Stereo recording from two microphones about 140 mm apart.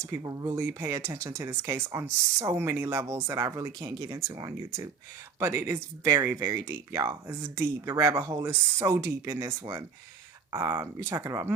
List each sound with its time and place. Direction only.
0.2 s speech: 25° right (ahead or behind)